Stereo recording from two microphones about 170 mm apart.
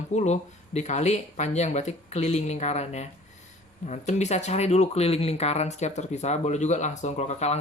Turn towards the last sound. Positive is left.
turn(degrees=40)  # may be behind; listen again after turning